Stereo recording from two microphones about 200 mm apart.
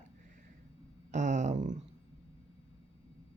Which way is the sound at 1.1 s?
40° right (ahead or behind).